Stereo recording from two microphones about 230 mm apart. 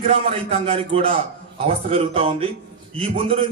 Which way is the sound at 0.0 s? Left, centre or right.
Right.